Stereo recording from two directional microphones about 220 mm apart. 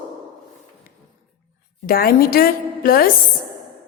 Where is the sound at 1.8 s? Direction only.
45° left (ahead or behind).